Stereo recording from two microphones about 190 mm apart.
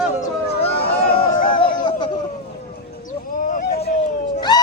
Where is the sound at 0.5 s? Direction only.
30° left (ahead or behind).